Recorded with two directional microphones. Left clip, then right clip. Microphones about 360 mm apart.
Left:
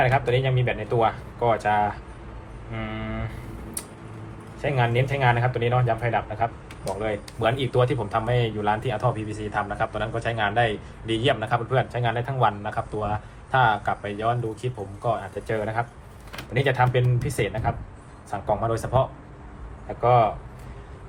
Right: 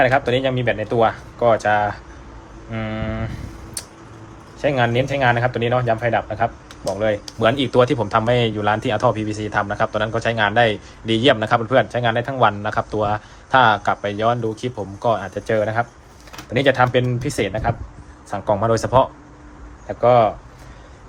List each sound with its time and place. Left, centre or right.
0.0 s a man's voice: right
4.6 s a man's voice: right